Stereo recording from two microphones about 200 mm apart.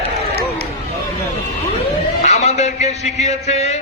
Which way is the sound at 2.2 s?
35° left (ahead or behind).